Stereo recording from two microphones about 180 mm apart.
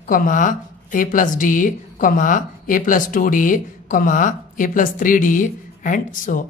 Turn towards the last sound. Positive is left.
turn(degrees=45)  # may be behind; listen again after turning